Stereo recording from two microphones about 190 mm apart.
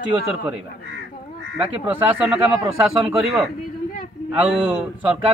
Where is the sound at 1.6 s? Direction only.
5° right (ahead or behind).